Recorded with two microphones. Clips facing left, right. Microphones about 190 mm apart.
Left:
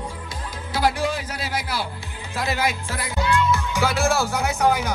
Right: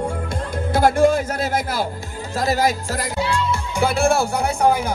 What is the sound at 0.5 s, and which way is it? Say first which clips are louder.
Speech: right 6 dB; 50° right (ahead or behind).